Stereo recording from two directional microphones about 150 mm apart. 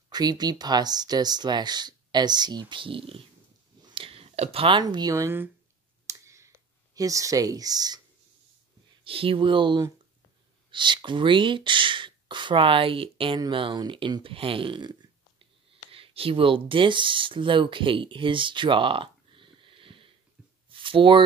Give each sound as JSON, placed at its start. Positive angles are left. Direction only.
{"t": 0.1, "sound": "speech", "side_deg": -25}
{"t": 6.0, "sound": "a sound", "side_deg": -20}
{"t": 7.0, "sound": "speech", "side_deg": -20}
{"t": 9.0, "sound": "speech", "side_deg": -35}